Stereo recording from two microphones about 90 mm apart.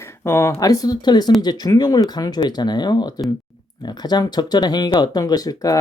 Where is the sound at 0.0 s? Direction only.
30° left (ahead or behind).